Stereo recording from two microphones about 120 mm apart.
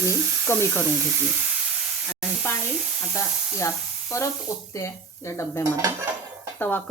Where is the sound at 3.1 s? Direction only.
25° left (ahead or behind).